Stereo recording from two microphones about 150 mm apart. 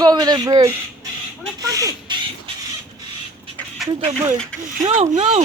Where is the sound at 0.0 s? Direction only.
25° right (ahead or behind).